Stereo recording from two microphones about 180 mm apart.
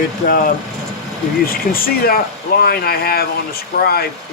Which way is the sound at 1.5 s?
55° left (ahead or behind).